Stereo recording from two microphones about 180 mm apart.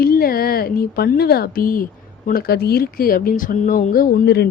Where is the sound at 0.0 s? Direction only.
55° left (ahead or behind).